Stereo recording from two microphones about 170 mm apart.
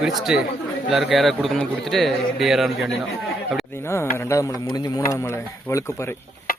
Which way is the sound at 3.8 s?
15° left (ahead or behind).